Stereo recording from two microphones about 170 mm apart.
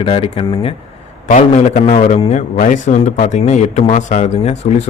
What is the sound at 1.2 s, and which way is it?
Speech, 45° left (ahead or behind).